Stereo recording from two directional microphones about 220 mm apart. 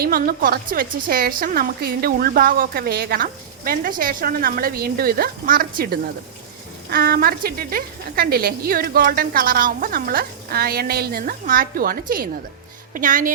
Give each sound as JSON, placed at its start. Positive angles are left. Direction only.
{"t": 0.0, "sound": "a woman's voice", "side_deg": -40}